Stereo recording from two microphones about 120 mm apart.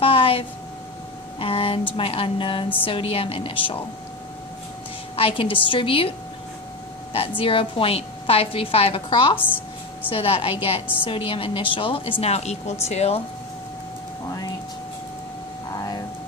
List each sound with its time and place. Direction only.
0.0 s a sound: 50° left (ahead or behind)
1.4 s a woman's voice: 50° left (ahead or behind)
5.1 s a woman's voice: 50° left (ahead or behind)
7.2 s a woman's voice: 50° left (ahead or behind)
15.7 s vehicle: 30° left (ahead or behind)